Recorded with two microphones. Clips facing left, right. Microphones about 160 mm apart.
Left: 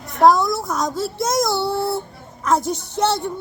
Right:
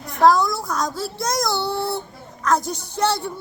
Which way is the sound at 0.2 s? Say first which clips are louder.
Left 2 dB; centre (ahead or behind).